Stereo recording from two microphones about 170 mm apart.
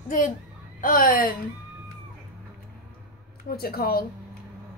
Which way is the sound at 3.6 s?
65° left (ahead or behind).